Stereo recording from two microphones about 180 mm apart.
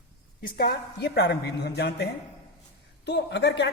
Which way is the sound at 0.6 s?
65° left (ahead or behind).